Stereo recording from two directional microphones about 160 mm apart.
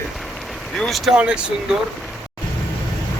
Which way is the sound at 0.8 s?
Centre (ahead or behind).